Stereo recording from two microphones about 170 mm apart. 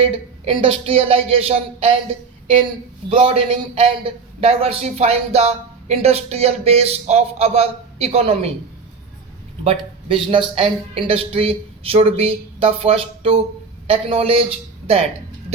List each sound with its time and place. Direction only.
0.0 s a man's voice: 30° right (ahead or behind)
9.6 s a man's voice: 30° right (ahead or behind)